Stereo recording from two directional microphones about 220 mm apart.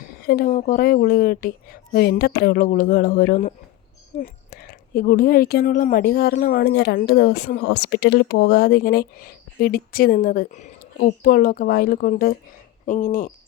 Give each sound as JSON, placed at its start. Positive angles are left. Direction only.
{"t": 0.3, "sound": "a woman's voice", "side_deg": 40}